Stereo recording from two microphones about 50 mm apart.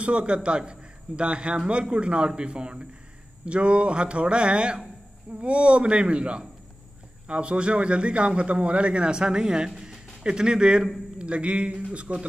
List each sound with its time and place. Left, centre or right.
0.0 s a man's voice: right